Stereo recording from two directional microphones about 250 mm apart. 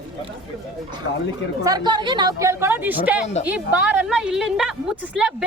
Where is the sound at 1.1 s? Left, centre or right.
Left.